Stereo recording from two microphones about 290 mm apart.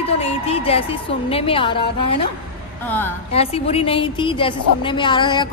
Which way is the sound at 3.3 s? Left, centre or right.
Centre.